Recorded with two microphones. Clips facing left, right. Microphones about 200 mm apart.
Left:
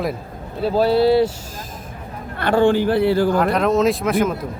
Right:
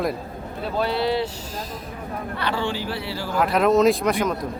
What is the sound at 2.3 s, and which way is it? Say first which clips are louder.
Speech: left 11 dB; 50° left (ahead or behind).